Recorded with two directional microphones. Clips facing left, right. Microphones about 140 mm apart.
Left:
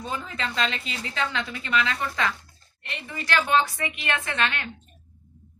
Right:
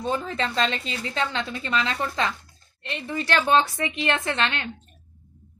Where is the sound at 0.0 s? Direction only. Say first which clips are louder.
Right 5 dB; 30° right (ahead or behind).